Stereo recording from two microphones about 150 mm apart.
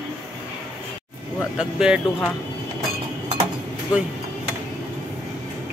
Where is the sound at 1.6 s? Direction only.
5° right (ahead or behind).